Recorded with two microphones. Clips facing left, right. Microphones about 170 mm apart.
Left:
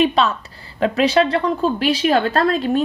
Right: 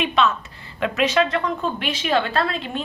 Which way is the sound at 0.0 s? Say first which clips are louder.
Left 4 dB; 35° left (ahead or behind).